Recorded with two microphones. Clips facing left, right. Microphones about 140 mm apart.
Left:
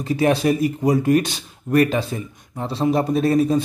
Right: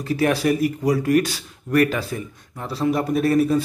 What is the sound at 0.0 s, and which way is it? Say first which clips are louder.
Speech: left 2 dB; 20° left (ahead or behind).